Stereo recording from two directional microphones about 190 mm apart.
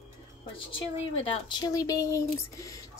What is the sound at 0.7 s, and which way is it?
Speech, 30° left (ahead or behind).